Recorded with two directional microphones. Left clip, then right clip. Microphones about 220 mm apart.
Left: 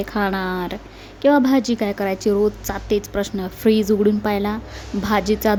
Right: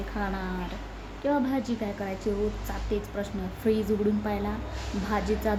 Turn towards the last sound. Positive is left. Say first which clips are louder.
# left 9 dB
turn(degrees=50)  # may be behind; listen again after turning